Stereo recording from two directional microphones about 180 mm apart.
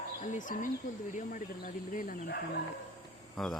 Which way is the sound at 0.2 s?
45° left (ahead or behind).